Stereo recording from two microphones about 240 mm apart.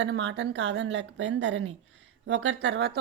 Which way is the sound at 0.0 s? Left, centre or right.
Right.